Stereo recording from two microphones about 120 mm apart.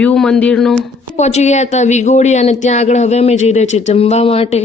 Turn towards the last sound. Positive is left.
turn(degrees=55)  # may be behind; listen again after turning